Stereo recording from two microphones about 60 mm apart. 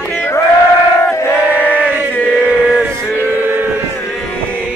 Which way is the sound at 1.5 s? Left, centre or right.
Right.